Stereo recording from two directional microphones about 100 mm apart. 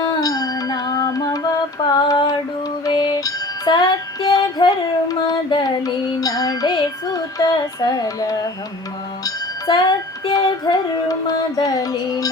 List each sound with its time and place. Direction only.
0.2 s carnatic music: 35° left (ahead or behind)
1.8 s female singing: 50° left (ahead or behind)
2.8 s music: 40° left (ahead or behind)